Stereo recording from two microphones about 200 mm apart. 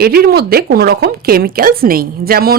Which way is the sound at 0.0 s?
50° right (ahead or behind).